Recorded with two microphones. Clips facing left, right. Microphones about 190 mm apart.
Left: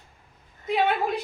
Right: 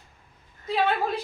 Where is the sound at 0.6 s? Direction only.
20° left (ahead or behind).